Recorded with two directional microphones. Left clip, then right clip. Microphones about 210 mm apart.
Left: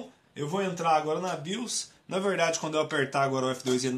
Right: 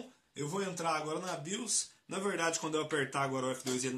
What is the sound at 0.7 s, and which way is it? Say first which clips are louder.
A man's voice: left 11 dB; 35° left (ahead or behind).